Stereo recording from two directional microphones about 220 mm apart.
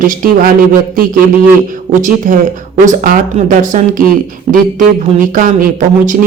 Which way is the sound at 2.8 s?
35° right (ahead or behind).